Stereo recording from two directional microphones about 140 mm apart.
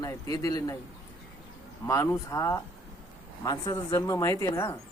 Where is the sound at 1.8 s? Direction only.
20° left (ahead or behind).